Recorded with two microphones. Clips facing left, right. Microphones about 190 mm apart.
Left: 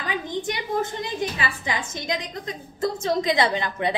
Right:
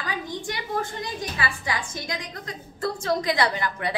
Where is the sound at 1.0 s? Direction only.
20° left (ahead or behind).